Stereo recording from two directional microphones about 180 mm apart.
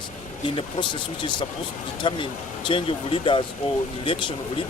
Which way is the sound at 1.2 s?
25° left (ahead or behind).